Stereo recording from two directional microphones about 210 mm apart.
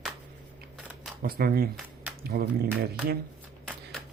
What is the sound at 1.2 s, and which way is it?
Speech, 45° right (ahead or behind).